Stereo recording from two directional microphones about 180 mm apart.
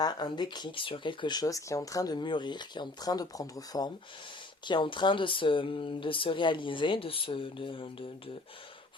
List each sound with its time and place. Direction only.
0.0 s speech: 20° left (ahead or behind)